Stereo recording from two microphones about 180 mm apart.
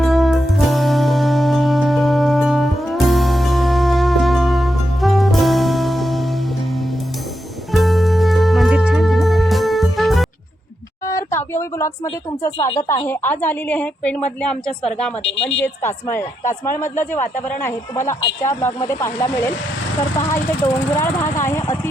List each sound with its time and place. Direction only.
0.0 s music: centre (ahead or behind)
7.7 s music: centre (ahead or behind)
11.0 s a sound: 15° left (ahead or behind)
13.1 s a woman's voice: 10° left (ahead or behind)
15.3 s speech: 90° left
15.6 s a woman's voice: 15° left (ahead or behind)